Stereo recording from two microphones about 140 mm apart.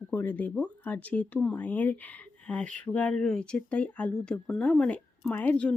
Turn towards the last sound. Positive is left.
turn(degrees=10)  # may be behind; listen again after turning